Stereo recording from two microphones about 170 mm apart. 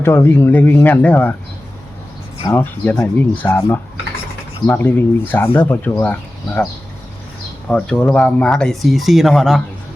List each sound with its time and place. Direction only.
0.0 s speech: 15° left (ahead or behind)
2.5 s speech: 10° left (ahead or behind)
7.7 s speech: 5° left (ahead or behind)